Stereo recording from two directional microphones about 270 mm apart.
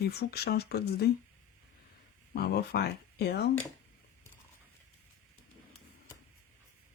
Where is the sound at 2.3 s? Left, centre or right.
Left.